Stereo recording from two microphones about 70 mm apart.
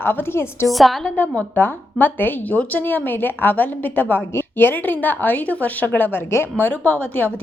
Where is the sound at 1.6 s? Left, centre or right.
Left.